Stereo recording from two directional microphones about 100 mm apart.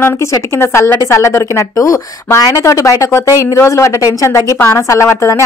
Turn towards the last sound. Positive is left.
turn(degrees=30)  # may be behind; listen again after turning